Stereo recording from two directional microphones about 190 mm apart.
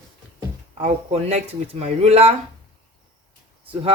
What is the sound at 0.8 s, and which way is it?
Speech, 35° right (ahead or behind).